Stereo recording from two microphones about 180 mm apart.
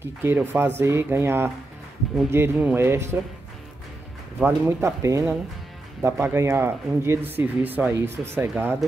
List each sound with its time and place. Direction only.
0.0 s speech: 10° right (ahead or behind)
4.4 s speech: 15° right (ahead or behind)